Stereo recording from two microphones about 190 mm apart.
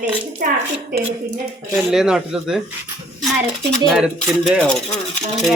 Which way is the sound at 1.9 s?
5° right (ahead or behind).